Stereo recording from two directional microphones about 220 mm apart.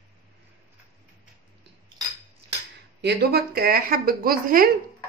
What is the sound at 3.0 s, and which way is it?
Speech, 50° right (ahead or behind).